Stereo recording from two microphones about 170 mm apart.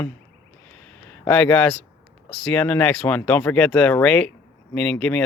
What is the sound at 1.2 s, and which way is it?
Speech, 5° left (ahead or behind).